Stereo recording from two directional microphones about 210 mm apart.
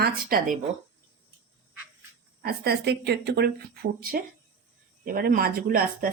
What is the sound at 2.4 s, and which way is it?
A woman's voice, 50° right (ahead or behind).